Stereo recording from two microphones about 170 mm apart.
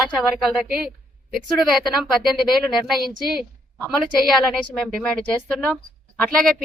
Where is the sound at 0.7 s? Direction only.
60° right (ahead or behind).